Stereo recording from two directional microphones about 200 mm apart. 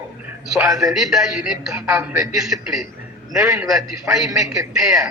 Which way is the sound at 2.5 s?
15° right (ahead or behind).